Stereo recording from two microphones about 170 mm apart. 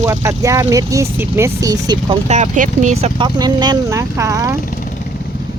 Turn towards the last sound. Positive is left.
turn(degrees=-20)  # may be behind; listen again after turning